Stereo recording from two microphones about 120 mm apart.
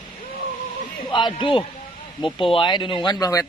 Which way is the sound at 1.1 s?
40° left (ahead or behind).